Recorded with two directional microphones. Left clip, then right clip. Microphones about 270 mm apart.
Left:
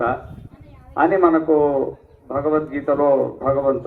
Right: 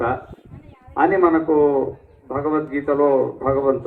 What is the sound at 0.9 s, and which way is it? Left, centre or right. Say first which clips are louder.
A man's voice: left 1 dB; left.